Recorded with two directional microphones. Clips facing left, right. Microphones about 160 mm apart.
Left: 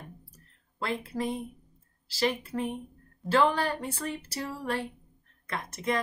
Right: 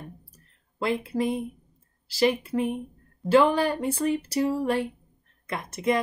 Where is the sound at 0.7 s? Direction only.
15° right (ahead or behind).